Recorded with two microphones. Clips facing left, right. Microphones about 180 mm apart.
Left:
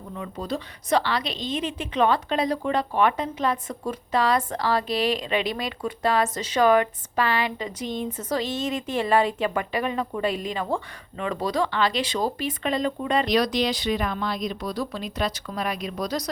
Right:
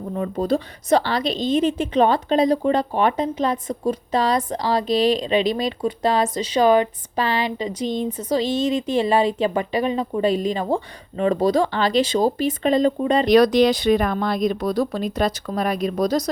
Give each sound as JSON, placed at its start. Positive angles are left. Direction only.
{"t": 0.1, "sound": "speech", "side_deg": -45}
{"t": 2.4, "sound": "speech", "side_deg": -25}
{"t": 3.7, "sound": "speech", "side_deg": -40}
{"t": 4.4, "sound": "speech", "side_deg": -15}
{"t": 4.9, "sound": "speech", "side_deg": -40}
{"t": 6.2, "sound": "speech", "side_deg": -15}
{"t": 6.7, "sound": "speech", "side_deg": -30}
{"t": 8.1, "sound": "speech", "side_deg": -15}
{"t": 9.4, "sound": "speech", "side_deg": -25}
{"t": 10.2, "sound": "speech", "side_deg": -35}
{"t": 13.2, "sound": "speech", "side_deg": -55}